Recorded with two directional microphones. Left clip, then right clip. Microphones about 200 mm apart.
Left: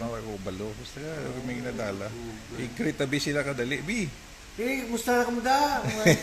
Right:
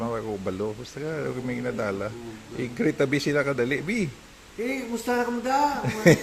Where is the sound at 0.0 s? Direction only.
30° right (ahead or behind).